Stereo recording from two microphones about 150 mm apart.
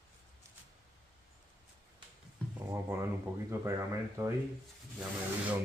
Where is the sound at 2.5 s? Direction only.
15° right (ahead or behind).